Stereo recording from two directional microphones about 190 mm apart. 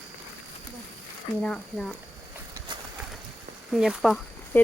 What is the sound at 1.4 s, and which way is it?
Speech, centre (ahead or behind).